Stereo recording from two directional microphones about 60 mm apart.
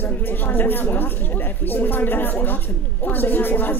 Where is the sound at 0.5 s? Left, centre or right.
Left.